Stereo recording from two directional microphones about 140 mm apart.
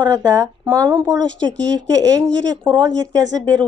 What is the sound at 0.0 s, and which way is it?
A woman's voice, 25° right (ahead or behind).